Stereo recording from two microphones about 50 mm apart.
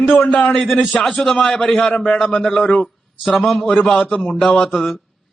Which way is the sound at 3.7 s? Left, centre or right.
Centre.